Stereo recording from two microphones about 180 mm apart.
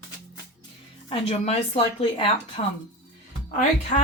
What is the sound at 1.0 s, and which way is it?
Speech, 35° left (ahead or behind).